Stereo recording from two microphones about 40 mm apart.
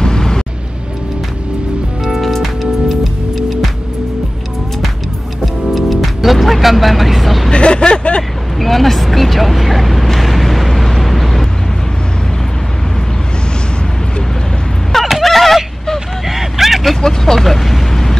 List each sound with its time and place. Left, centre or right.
0.0 s music: centre
2.0 s music: centre
5.4 s music: centre
7.5 s speech: left
8.2 s vehicle: centre
15.0 s vehicle: centre
17.0 s vehicle: centre